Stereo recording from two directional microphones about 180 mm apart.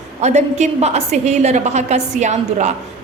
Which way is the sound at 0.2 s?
40° right (ahead or behind).